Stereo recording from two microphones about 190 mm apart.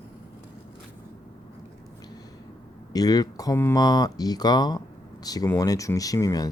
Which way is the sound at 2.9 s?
20° left (ahead or behind).